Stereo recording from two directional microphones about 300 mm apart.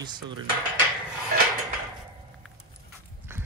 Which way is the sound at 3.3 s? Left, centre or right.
Centre.